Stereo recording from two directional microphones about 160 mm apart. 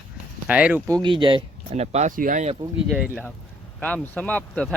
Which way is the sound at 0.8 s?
25° right (ahead or behind).